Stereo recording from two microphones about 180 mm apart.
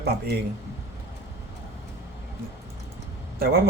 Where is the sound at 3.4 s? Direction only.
60° right (ahead or behind).